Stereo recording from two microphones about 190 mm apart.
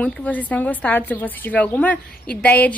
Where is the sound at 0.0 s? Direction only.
10° left (ahead or behind).